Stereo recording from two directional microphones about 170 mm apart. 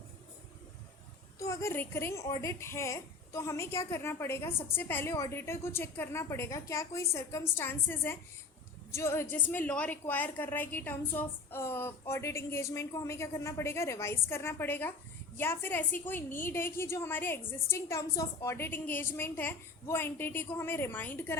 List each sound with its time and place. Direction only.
1.4 s a woman's voice: 15° left (ahead or behind)